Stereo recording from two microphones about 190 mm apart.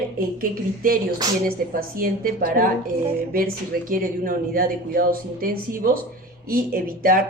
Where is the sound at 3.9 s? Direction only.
50° right (ahead or behind).